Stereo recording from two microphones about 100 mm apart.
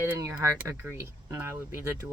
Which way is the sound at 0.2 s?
30° right (ahead or behind).